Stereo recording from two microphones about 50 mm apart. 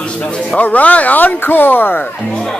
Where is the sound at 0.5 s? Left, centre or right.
Left.